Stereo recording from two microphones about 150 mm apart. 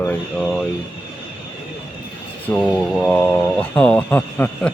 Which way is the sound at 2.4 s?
10° left (ahead or behind).